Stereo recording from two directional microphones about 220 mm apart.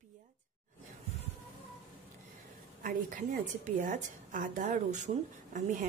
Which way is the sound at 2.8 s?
35° right (ahead or behind).